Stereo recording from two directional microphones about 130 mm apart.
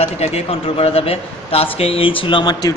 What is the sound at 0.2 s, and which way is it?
A man's voice, 50° left (ahead or behind).